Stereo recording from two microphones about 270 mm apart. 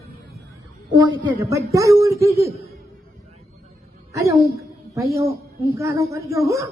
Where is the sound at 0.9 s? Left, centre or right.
Centre.